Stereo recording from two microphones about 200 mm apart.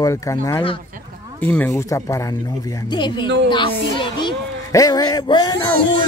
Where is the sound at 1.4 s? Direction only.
10° left (ahead or behind).